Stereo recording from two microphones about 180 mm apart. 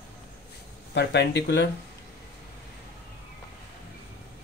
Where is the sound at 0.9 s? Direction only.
70° left (ahead or behind).